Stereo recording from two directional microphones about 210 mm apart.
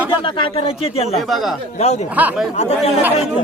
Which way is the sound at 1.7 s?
30° left (ahead or behind).